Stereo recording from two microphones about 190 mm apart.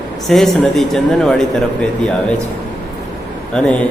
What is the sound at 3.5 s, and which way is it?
Speech, 5° left (ahead or behind).